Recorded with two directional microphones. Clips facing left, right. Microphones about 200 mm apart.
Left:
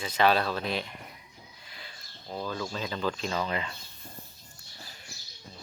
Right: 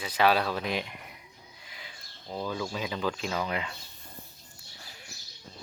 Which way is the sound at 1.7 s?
15° right (ahead or behind).